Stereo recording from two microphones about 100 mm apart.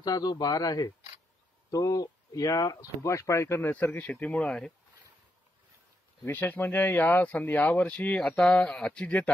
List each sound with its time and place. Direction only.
0.0 s speech: 40° left (ahead or behind); by 4.7 s 10° left (ahead or behind)
6.2 s speech: 20° left (ahead or behind)